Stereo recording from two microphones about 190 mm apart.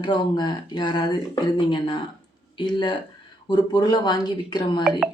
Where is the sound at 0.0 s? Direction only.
25° left (ahead or behind).